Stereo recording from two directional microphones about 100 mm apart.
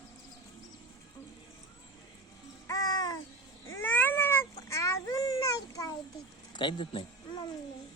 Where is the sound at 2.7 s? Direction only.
40° left (ahead or behind).